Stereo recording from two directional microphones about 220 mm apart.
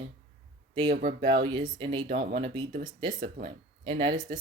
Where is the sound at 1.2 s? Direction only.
20° right (ahead or behind).